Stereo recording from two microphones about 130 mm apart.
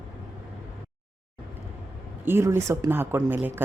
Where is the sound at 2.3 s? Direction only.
20° right (ahead or behind).